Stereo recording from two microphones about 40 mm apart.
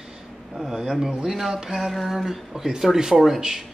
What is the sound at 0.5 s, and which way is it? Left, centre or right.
Speech, centre.